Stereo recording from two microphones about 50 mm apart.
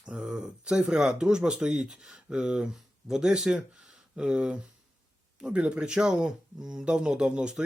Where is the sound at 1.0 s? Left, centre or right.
Centre.